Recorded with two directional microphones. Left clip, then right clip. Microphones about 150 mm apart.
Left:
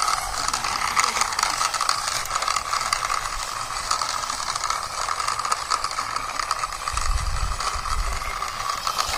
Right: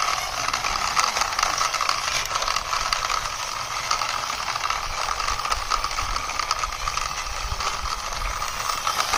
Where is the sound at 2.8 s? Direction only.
50° right (ahead or behind).